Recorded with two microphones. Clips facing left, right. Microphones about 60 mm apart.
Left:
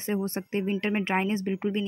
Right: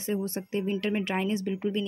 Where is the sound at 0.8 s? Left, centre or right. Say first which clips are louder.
Left 2 dB; left.